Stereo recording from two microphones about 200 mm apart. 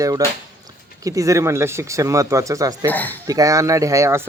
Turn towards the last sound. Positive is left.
turn(degrees=-15)  # may be behind; listen again after turning